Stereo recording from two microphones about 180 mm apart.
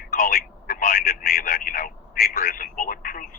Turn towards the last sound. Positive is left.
turn(degrees=50)  # may be behind; listen again after turning